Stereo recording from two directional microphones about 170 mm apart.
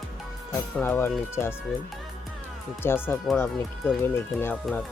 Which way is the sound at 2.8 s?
10° left (ahead or behind).